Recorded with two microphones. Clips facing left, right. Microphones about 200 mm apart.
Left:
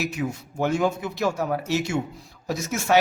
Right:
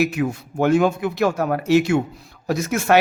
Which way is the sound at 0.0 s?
60° right (ahead or behind).